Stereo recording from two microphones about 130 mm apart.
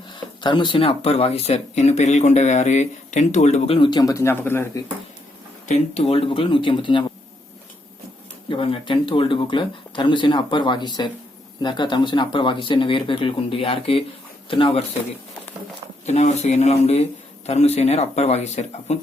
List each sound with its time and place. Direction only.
0.4 s speech: 35° left (ahead or behind); by 3.8 s 60° left (ahead or behind)
3.8 s speech: 35° left (ahead or behind); by 4.8 s 20° left (ahead or behind)
5.6 s speech: 60° left (ahead or behind); by 7.0 s 40° left (ahead or behind)
8.4 s speech: 40° left (ahead or behind)
16.0 s speech: 60° left (ahead or behind)